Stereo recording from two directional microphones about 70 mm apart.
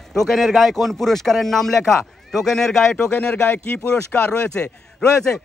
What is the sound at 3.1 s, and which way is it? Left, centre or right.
Speech, left.